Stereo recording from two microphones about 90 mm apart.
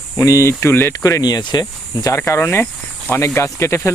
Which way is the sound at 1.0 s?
45° left (ahead or behind).